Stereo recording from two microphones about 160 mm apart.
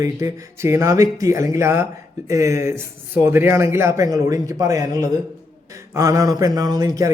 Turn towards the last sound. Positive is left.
turn(degrees=-20)  # may be behind; listen again after turning